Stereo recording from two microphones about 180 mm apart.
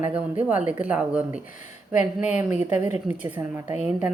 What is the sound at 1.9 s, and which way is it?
Speech, 40° left (ahead or behind).